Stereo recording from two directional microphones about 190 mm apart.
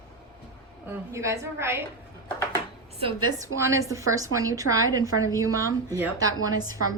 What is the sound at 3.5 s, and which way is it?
A woman's voice, 15° right (ahead or behind).